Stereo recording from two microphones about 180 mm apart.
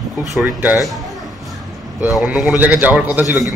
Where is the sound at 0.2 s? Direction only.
Centre (ahead or behind).